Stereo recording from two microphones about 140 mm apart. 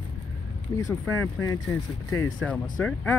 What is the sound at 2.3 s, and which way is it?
Speech, 5° left (ahead or behind).